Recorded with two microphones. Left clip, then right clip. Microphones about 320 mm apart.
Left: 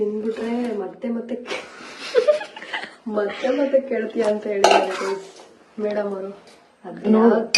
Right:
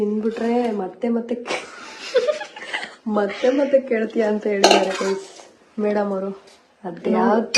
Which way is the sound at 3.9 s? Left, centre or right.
Centre.